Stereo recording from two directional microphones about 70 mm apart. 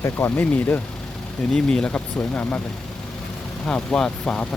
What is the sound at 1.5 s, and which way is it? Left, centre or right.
Speech, centre.